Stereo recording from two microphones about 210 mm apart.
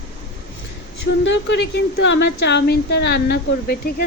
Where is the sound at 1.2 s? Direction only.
60° left (ahead or behind).